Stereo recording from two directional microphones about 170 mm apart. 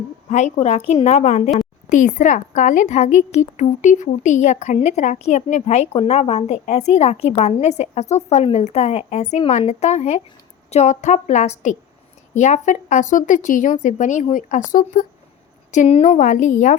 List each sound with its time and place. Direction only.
0.3 s a woman's voice: 45° left (ahead or behind)